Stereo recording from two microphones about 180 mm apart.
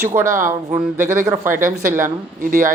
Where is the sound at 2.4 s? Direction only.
50° right (ahead or behind).